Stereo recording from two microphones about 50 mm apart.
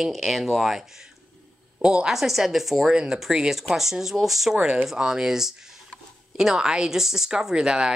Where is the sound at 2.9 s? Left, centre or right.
Centre.